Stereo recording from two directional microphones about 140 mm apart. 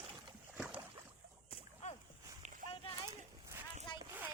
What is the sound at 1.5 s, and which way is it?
Splash, 45° left (ahead or behind).